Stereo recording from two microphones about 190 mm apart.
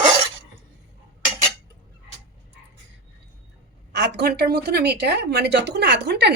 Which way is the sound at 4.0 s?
60° right (ahead or behind).